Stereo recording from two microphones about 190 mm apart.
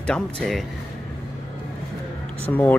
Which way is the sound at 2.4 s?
10° left (ahead or behind).